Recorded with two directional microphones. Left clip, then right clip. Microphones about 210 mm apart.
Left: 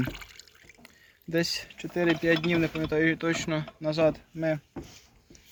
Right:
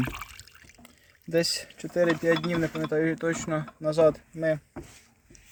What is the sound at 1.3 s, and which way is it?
Speech, 55° right (ahead or behind).